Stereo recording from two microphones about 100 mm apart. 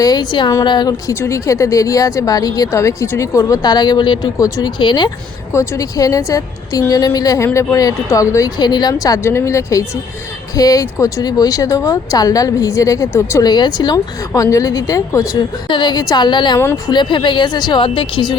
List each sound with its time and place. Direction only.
0.0 s speech: 40° left (ahead or behind)
1.2 s speech: 30° left (ahead or behind); by 4.3 s 50° left (ahead or behind)
4.4 s speech: 35° left (ahead or behind)
4.8 s speech: 50° left (ahead or behind)
5.5 s speech: 35° left (ahead or behind)
8.6 s speech: 45° left (ahead or behind)
13.4 s speech: 45° left (ahead or behind)
15.7 s speech: 45° left (ahead or behind)